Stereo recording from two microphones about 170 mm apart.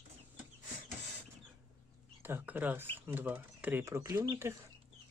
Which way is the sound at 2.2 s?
10° right (ahead or behind).